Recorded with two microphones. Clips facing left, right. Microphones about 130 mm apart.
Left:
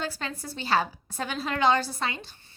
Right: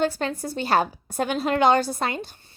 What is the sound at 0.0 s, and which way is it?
A woman's voice, 50° right (ahead or behind).